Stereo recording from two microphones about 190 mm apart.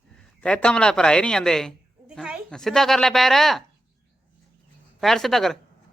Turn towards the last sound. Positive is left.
turn(degrees=0)  # may be behind; listen again after turning